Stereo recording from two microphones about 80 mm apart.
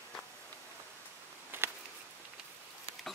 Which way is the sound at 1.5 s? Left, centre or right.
Right.